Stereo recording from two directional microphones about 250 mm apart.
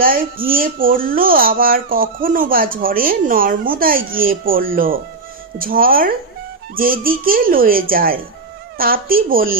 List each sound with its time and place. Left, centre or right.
0.0 s speech: right